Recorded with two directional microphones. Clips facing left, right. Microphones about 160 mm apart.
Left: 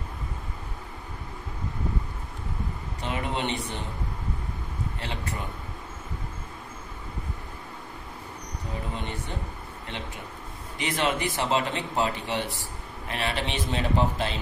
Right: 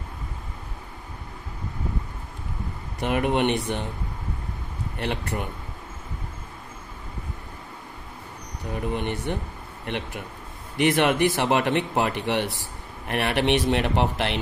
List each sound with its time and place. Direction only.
3.0 s speech: 60° right (ahead or behind)
4.9 s speech: 65° right (ahead or behind)
8.9 s speech: 65° right (ahead or behind)